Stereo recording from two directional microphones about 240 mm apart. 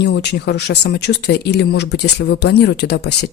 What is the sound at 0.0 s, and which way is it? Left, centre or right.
Speech, left.